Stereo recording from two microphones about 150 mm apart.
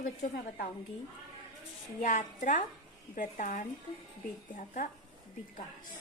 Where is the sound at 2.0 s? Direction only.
55° left (ahead or behind).